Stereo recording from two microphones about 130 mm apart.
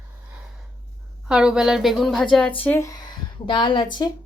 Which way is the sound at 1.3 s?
5° right (ahead or behind).